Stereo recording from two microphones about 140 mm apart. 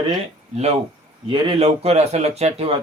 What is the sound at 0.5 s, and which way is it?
A man's voice, 50° right (ahead or behind).